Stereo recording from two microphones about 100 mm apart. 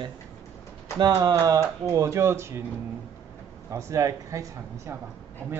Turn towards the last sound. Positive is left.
turn(degrees=-35)  # may be behind; listen again after turning